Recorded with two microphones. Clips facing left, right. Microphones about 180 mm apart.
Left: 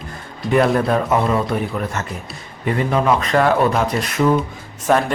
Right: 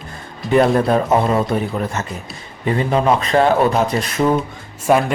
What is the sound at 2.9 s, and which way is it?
Speech, 25° right (ahead or behind).